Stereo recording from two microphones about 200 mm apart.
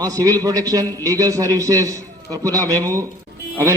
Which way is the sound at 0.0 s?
15° right (ahead or behind).